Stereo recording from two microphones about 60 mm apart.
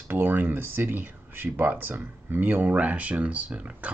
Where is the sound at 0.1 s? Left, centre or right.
Right.